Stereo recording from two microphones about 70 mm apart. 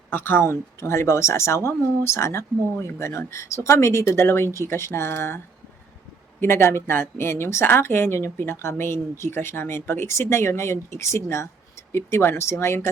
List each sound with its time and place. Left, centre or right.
0.1 s speech: left
6.4 s speech: left